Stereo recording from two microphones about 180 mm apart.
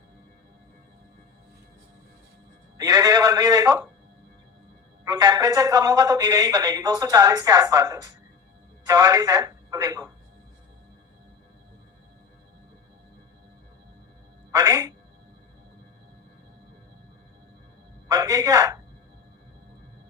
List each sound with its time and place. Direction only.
2.7 s a man's voice: 20° right (ahead or behind)
5.0 s speech: 20° right (ahead or behind)
14.5 s a woman's voice: 20° right (ahead or behind)
18.1 s speech: 20° right (ahead or behind)